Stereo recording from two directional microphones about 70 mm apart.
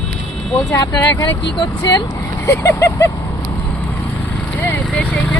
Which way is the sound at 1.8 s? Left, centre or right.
Left.